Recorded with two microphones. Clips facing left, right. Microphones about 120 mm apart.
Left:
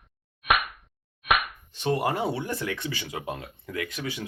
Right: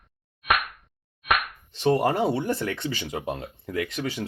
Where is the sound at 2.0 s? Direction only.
35° right (ahead or behind).